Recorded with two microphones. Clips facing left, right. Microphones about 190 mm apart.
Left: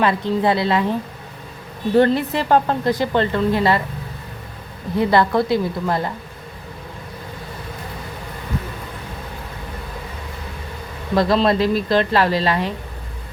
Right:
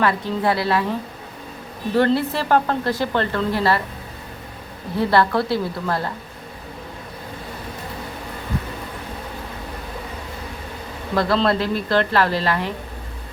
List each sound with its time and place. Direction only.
0.0 s a woman's voice: 20° left (ahead or behind)
2.0 s a woman's voice: 20° left (ahead or behind)
4.9 s a woman's voice: 15° left (ahead or behind)
11.1 s a woman's voice: 20° left (ahead or behind)